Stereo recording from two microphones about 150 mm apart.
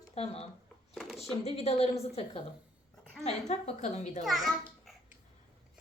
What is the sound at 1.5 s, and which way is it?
Speech, 45° left (ahead or behind).